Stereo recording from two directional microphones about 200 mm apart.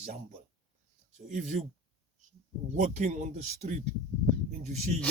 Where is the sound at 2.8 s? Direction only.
35° right (ahead or behind).